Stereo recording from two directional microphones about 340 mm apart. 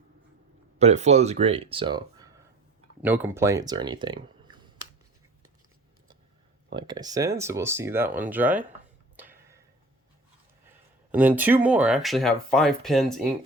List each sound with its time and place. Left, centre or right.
0.8 s speech: centre
6.7 s speech: centre
9.1 s a sound: centre
11.1 s speech: centre